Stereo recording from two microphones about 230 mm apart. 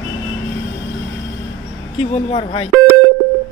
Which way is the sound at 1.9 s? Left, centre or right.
Left.